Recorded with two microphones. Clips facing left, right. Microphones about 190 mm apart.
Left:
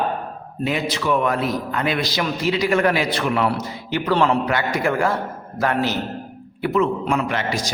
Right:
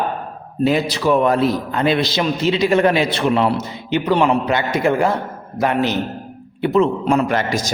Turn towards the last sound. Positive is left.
turn(degrees=-45)  # may be behind; listen again after turning